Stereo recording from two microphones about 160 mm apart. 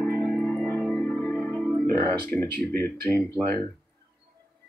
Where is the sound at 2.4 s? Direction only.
90° right.